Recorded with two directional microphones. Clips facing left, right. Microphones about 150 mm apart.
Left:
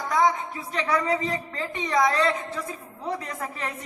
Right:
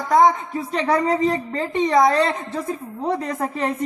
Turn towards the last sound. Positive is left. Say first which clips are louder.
# right 9 dB
turn(degrees=-40)  # may be behind; listen again after turning